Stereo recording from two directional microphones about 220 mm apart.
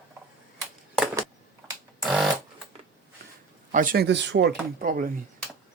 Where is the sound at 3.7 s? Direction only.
40° right (ahead or behind).